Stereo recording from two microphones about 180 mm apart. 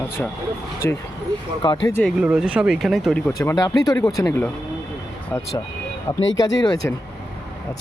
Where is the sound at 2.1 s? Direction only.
5° right (ahead or behind).